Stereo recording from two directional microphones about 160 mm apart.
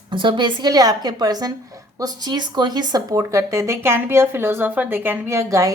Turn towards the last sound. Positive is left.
turn(degrees=-20)  # may be behind; listen again after turning